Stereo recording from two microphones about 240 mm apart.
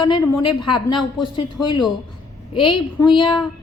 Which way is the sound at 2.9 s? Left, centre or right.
Centre.